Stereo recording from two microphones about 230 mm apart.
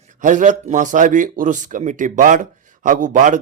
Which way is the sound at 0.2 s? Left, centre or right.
Right.